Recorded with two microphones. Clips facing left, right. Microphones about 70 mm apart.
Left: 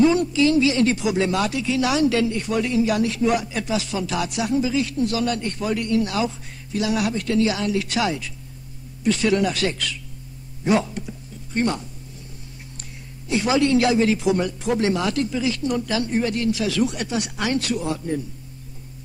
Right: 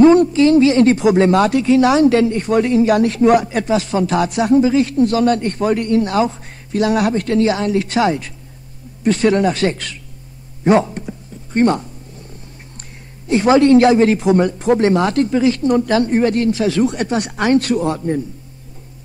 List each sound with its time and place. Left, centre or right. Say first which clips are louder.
0.0 s speech: right 8 dB; right
10.6 s a sound: right 7 dB; right
13.3 s speech: right 8 dB; right